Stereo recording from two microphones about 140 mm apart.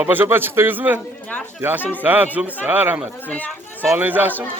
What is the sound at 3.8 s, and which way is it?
Speech, 15° right (ahead or behind).